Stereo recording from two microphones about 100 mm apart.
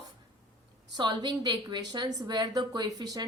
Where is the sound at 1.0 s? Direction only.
45° right (ahead or behind).